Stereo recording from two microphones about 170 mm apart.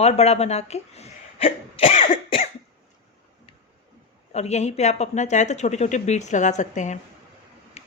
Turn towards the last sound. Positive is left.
turn(degrees=40)  # may be behind; listen again after turning